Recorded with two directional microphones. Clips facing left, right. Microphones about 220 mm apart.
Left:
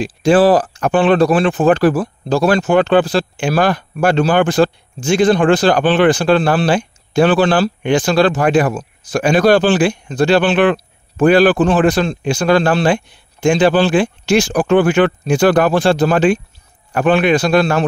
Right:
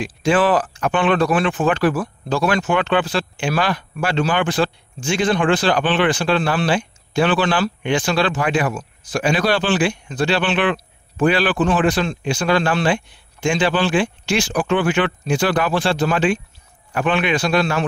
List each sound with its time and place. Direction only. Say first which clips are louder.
0.0 s speech: left 6 dB; 35° left (ahead or behind)